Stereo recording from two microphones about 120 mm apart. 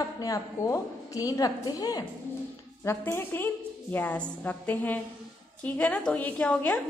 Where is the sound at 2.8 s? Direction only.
20° left (ahead or behind).